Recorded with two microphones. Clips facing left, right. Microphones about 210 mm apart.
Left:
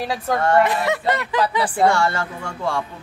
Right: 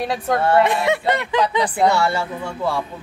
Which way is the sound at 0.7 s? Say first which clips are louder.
Right 2 dB; 25° right (ahead or behind).